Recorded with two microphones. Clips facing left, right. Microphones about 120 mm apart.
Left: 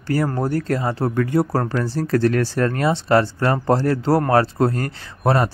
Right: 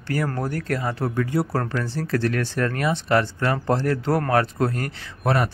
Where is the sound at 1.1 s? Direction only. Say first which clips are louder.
Left 5 dB; 55° left (ahead or behind).